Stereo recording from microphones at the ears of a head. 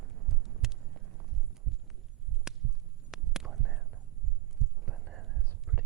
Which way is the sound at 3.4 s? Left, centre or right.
Right.